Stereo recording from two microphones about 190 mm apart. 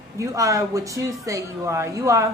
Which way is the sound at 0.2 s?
15° right (ahead or behind).